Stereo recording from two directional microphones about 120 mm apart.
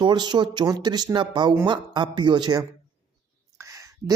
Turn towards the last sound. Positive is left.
turn(degrees=-25)  # may be behind; listen again after turning